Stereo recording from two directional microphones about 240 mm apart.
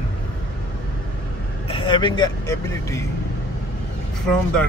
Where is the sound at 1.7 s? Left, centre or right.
Left.